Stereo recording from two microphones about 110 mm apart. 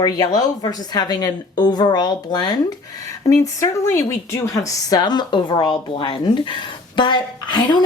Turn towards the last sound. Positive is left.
turn(degrees=45)  # may be behind; listen again after turning